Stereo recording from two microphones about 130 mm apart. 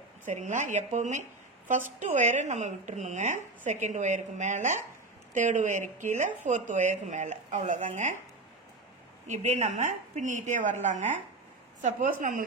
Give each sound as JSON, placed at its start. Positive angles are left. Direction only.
{"t": 0.2, "sound": "speech", "side_deg": -70}
{"t": 9.3, "sound": "speech", "side_deg": -60}